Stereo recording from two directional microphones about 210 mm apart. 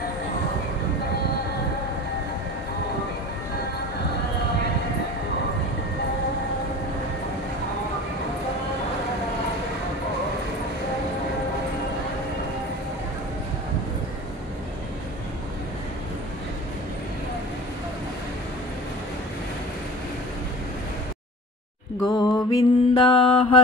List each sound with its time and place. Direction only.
22.0 s mantra: 20° left (ahead or behind)